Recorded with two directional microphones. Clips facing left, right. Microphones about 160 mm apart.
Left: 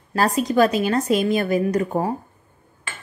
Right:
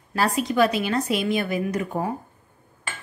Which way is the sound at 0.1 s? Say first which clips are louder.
Left 3 dB; 40° left (ahead or behind).